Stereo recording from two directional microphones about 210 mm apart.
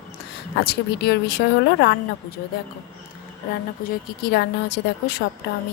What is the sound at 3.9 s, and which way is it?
A woman's voice, 50° left (ahead or behind).